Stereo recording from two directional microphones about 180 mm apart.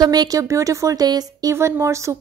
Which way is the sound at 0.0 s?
20° right (ahead or behind).